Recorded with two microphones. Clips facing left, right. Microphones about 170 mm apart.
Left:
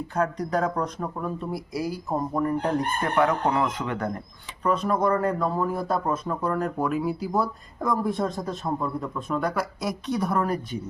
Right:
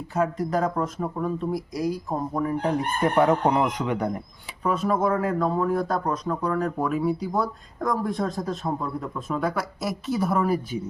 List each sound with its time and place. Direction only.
0.1 s a man's voice: 5° right (ahead or behind)
3.2 s a man's voice: 25° right (ahead or behind); by 10.8 s 5° right (ahead or behind)